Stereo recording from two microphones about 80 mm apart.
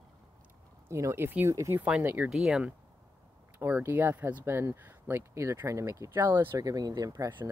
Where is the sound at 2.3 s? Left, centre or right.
Centre.